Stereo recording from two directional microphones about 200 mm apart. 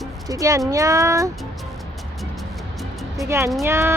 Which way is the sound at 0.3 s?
15° right (ahead or behind).